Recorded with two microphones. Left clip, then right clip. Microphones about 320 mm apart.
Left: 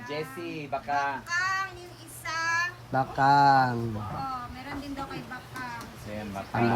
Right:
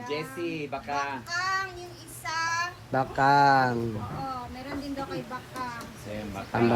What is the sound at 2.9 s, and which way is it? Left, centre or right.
Speech, centre.